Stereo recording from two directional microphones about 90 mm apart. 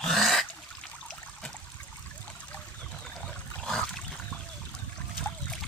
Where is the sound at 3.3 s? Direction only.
5° left (ahead or behind).